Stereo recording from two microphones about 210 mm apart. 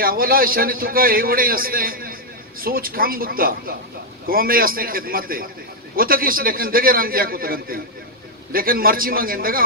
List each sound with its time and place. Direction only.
0.0 s a man's voice: 45° right (ahead or behind)